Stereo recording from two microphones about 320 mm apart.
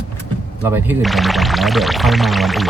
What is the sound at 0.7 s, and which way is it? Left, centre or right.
Speech, centre.